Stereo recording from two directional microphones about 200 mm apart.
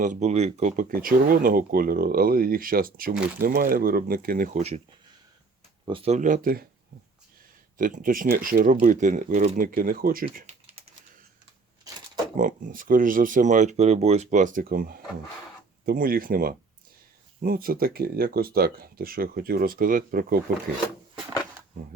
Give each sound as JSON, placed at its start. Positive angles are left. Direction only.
{"t": 0.0, "sound": "speech", "side_deg": -35}
{"t": 5.8, "sound": "speech", "side_deg": -25}
{"t": 7.8, "sound": "speech", "side_deg": -45}
{"t": 12.4, "sound": "speech", "side_deg": -45}